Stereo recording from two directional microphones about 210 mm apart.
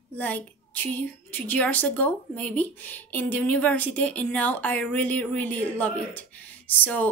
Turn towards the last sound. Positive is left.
turn(degrees=10)  # may be behind; listen again after turning